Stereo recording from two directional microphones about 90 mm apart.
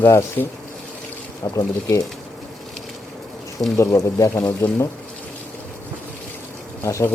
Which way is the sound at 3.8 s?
35° left (ahead or behind).